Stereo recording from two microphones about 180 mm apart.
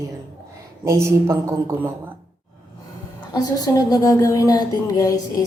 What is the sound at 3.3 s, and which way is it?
Speech, 20° left (ahead or behind).